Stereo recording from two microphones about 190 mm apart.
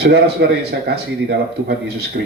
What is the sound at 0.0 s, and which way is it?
Speech, 60° right (ahead or behind).